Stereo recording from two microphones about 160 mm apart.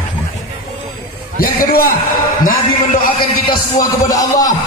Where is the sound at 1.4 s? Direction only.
65° left (ahead or behind).